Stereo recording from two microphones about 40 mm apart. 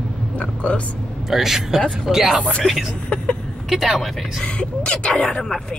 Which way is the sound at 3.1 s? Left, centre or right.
Left.